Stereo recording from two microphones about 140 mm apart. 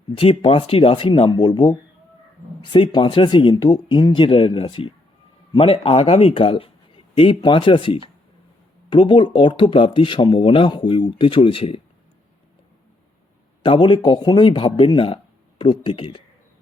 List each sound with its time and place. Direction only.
0.2 s speech: 45° left (ahead or behind)
13.6 s speech: 35° left (ahead or behind)